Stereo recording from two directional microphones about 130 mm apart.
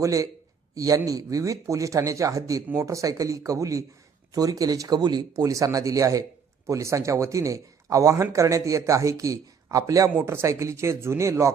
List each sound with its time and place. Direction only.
0.0 s speech: 25° right (ahead or behind)